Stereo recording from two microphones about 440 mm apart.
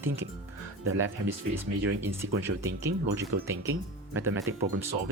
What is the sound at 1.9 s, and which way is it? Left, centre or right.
Speech, centre.